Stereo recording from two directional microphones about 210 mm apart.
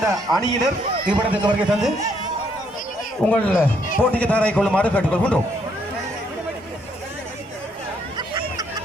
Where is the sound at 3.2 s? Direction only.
5° left (ahead or behind).